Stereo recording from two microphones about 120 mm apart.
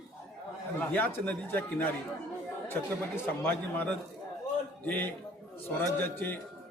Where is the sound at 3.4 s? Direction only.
15° left (ahead or behind).